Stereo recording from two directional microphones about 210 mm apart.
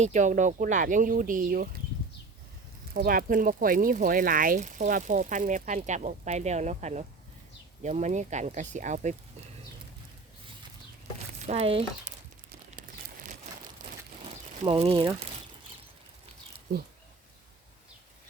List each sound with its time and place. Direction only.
0.0 s speech: 35° right (ahead or behind)
2.9 s speech: 45° right (ahead or behind)
11.4 s speech: 30° right (ahead or behind)
14.6 s speech: 25° right (ahead or behind)